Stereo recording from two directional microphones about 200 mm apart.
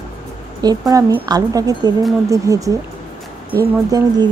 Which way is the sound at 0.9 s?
20° right (ahead or behind).